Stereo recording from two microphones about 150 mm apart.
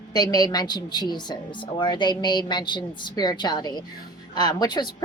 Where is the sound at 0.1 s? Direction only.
25° left (ahead or behind).